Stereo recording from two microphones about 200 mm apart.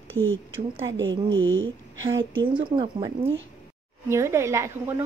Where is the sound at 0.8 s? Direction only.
70° right (ahead or behind).